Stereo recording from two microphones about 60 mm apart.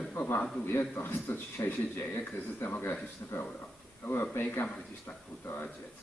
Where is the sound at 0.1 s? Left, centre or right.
Left.